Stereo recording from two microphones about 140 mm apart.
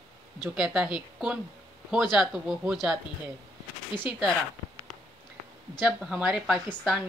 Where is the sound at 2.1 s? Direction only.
Centre (ahead or behind).